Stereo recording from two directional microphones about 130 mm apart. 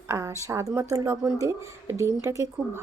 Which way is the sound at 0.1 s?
20° right (ahead or behind).